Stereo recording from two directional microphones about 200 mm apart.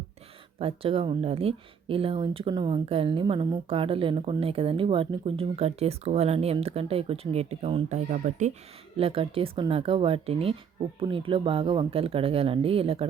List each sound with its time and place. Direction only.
0.6 s speech: 30° right (ahead or behind)